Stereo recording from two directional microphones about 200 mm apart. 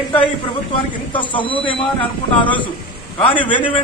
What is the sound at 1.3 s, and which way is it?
Speech, 25° left (ahead or behind).